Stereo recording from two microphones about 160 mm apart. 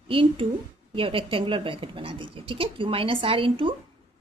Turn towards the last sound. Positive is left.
turn(degrees=-35)  # may be behind; listen again after turning